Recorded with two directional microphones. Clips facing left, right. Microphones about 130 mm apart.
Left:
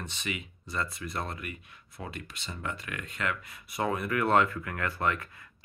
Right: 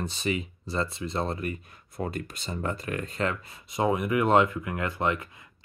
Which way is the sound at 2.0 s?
40° right (ahead or behind).